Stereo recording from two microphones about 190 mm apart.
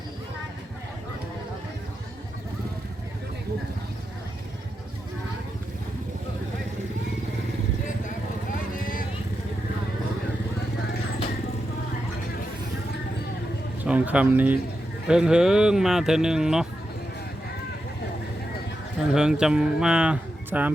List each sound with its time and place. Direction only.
13.8 s speech: 5° right (ahead or behind)
19.1 s speech: 5° right (ahead or behind)